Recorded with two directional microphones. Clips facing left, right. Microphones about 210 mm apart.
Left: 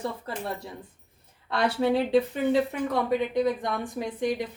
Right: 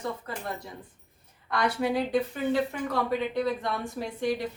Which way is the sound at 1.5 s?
25° left (ahead or behind).